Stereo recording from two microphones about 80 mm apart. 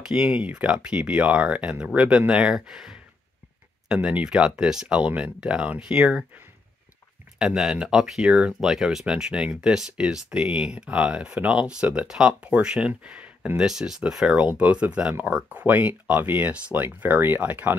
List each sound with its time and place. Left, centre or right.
0.0 s speech: centre
7.3 s speech: centre